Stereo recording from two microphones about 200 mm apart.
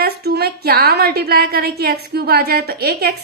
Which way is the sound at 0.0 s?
50° right (ahead or behind).